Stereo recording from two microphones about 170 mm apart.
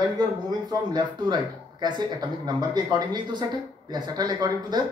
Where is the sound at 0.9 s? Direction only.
25° right (ahead or behind).